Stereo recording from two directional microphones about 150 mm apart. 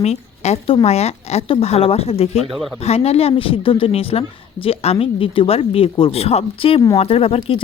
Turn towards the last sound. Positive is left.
turn(degrees=40)  # may be behind; listen again after turning